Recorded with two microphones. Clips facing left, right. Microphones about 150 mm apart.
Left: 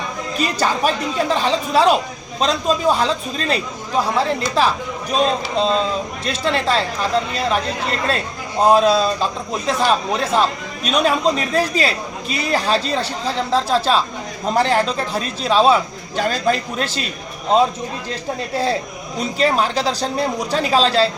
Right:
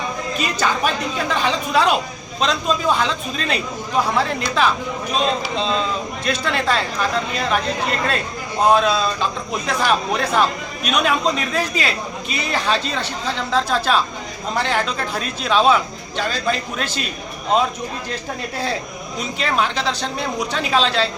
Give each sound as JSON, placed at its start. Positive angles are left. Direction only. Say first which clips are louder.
{"t": 0.3, "sound": "speech", "louder": "left 3 dB", "side_deg": 35}
{"t": 18.1, "sound": "speech", "louder": "left 3 dB", "side_deg": 30}